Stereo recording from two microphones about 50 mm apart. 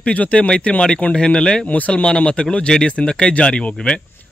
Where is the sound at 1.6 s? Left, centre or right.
Left.